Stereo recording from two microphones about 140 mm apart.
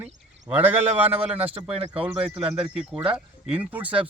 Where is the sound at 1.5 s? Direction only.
45° right (ahead or behind).